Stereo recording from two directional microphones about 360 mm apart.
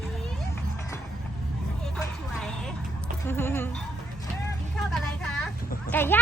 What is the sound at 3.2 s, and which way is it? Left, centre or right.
Insect, centre.